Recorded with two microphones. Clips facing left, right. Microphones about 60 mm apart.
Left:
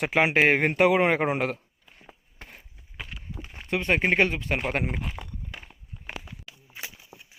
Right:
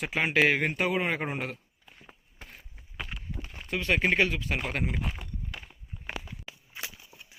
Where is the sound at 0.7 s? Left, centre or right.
Left.